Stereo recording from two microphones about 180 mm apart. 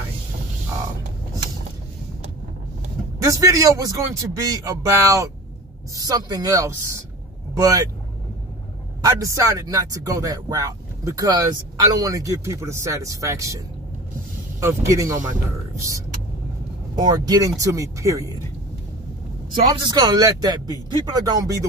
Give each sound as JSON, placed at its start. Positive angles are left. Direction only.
{"t": 3.3, "sound": "speech", "side_deg": -20}
{"t": 9.0, "sound": "speech", "side_deg": -20}
{"t": 14.6, "sound": "speech", "side_deg": -15}
{"t": 19.8, "sound": "speech", "side_deg": -25}